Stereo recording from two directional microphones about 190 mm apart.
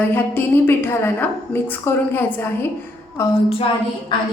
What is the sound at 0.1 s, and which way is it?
A woman's voice, 10° left (ahead or behind).